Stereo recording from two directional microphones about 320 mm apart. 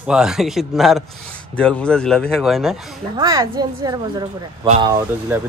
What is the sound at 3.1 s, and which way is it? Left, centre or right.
Speech, centre.